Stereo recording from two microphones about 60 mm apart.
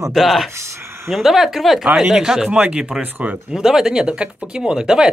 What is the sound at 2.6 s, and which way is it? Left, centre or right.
Speech, centre.